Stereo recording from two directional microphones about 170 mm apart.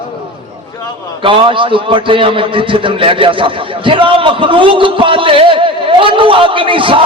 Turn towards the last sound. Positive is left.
turn(degrees=-30)  # may be behind; listen again after turning